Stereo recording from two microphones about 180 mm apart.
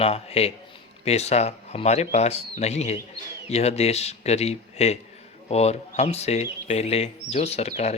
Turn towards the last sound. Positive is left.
turn(degrees=35)  # may be behind; listen again after turning